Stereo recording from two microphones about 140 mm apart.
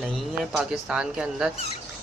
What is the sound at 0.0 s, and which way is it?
Speech, centre (ahead or behind).